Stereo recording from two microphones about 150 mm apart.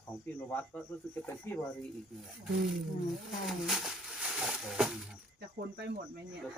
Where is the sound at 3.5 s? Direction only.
Centre (ahead or behind).